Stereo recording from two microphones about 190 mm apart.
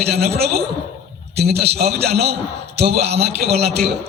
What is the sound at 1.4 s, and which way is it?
A man's voice, 60° right (ahead or behind).